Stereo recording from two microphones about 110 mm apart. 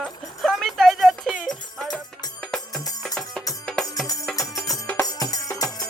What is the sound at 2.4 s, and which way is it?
Music, 5° left (ahead or behind).